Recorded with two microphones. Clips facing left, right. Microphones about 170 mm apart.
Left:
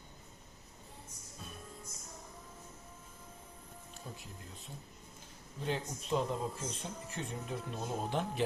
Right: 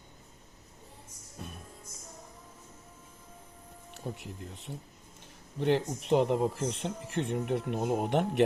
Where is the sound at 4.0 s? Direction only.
70° right (ahead or behind).